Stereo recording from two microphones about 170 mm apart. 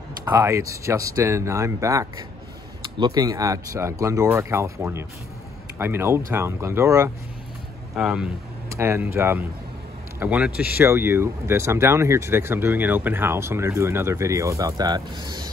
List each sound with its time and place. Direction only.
0.2 s speech: 15° right (ahead or behind)
7.9 s speech: 5° right (ahead or behind)
8.6 s speech: 15° right (ahead or behind)